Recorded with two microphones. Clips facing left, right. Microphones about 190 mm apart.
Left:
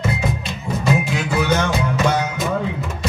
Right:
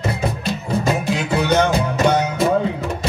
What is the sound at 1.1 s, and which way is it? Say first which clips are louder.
Music: right 2 dB; 35° right (ahead or behind).